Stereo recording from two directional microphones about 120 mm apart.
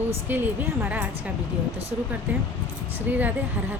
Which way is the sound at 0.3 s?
15° right (ahead or behind).